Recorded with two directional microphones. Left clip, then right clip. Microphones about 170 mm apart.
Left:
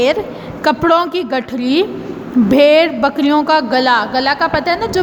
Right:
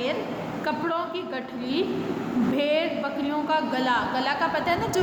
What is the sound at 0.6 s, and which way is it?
A woman's voice, 55° left (ahead or behind).